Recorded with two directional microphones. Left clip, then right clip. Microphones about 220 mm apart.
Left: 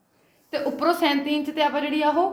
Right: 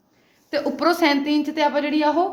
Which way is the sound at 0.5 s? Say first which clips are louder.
Right 2 dB; 35° right (ahead or behind).